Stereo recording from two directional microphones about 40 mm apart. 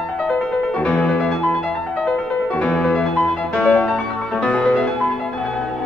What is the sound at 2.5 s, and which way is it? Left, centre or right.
Music, left.